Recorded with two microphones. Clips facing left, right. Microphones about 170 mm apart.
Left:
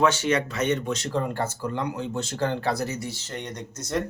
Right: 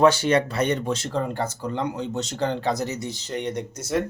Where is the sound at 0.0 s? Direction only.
35° right (ahead or behind).